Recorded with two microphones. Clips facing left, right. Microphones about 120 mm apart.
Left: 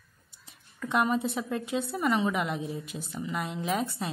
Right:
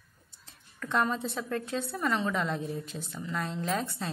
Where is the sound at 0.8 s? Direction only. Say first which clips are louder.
Left 3 dB; 10° left (ahead or behind).